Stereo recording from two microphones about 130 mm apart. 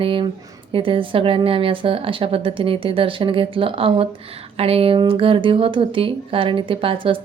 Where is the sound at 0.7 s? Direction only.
45° right (ahead or behind).